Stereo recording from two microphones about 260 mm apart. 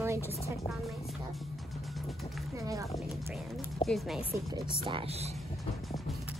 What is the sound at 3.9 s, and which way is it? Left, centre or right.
Speech, centre.